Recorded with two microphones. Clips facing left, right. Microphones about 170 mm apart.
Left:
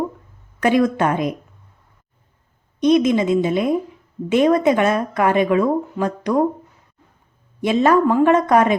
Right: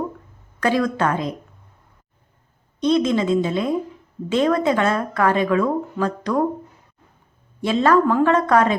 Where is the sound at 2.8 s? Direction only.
15° left (ahead or behind).